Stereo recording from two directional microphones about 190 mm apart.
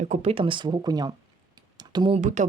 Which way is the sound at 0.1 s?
30° right (ahead or behind).